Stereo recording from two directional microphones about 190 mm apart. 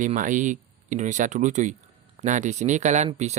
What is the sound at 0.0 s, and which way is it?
Speech, 40° right (ahead or behind).